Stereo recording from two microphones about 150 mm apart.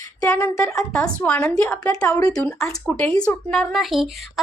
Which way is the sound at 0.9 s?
10° left (ahead or behind).